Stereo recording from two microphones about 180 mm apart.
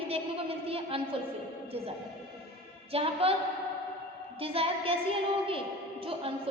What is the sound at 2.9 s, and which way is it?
Speech, 30° right (ahead or behind).